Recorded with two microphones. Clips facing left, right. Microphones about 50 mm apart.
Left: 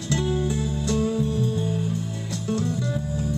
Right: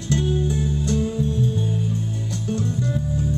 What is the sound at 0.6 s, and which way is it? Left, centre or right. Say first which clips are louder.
Music: right 1 dB; right.